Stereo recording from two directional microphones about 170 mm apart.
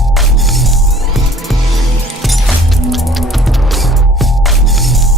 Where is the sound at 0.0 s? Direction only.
Centre (ahead or behind).